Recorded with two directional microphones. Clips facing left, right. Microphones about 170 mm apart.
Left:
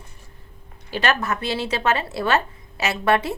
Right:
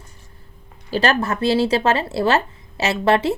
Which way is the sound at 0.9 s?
35° right (ahead or behind).